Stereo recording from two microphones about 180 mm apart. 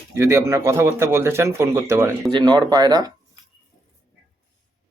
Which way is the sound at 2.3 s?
25° right (ahead or behind).